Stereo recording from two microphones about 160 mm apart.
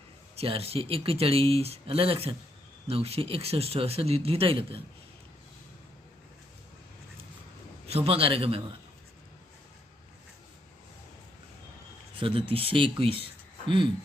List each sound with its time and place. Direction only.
0.3 s speech: 40° right (ahead or behind)
7.9 s speech: 40° right (ahead or behind)
12.1 s speech: 35° right (ahead or behind)